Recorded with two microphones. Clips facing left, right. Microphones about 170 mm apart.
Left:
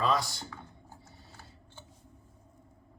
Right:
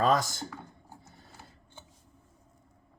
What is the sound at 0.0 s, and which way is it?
Speech, 45° right (ahead or behind).